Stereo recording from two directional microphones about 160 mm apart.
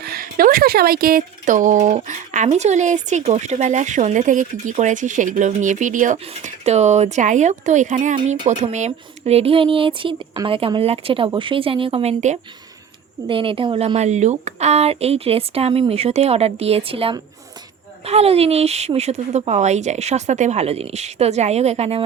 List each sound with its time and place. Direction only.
0.0 s a woman's voice: 65° right (ahead or behind); by 12.4 s 45° right (ahead or behind)
13.2 s a woman's voice: 30° right (ahead or behind)